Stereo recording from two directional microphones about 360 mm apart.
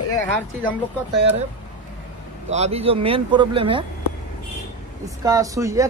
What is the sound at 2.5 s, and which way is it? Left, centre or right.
Speech, centre.